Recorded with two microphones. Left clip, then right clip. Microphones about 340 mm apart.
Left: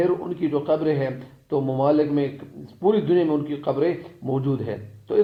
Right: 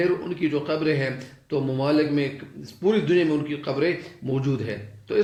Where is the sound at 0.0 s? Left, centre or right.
Centre.